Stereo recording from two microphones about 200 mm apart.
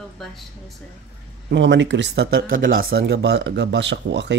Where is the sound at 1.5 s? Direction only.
65° right (ahead or behind).